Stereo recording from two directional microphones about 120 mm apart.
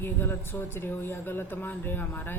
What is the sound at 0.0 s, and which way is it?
A woman's voice, 20° left (ahead or behind).